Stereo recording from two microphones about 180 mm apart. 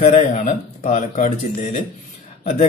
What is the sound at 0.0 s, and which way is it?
A man's voice, 45° left (ahead or behind).